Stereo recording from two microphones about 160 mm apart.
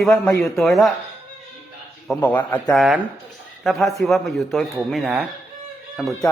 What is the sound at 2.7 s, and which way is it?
Speech, centre (ahead or behind).